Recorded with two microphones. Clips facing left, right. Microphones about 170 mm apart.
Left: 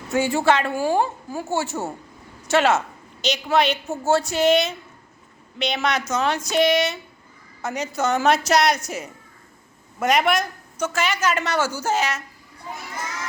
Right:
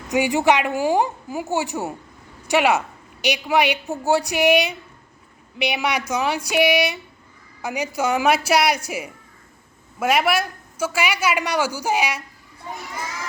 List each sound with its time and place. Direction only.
0.1 s a woman's voice: 15° right (ahead or behind)